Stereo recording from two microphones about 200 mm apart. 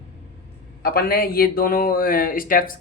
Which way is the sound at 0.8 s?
50° left (ahead or behind).